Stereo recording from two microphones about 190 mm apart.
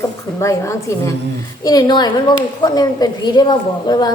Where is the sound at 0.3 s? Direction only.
15° left (ahead or behind).